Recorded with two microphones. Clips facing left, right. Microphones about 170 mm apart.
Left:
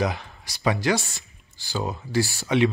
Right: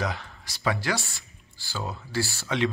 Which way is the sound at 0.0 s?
15° left (ahead or behind).